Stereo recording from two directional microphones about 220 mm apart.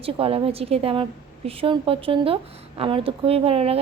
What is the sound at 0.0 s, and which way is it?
A woman's voice, 25° right (ahead or behind).